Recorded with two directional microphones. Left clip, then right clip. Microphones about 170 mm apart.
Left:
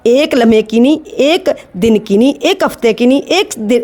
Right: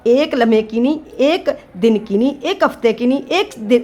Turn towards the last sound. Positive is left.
turn(degrees=45)  # may be behind; listen again after turning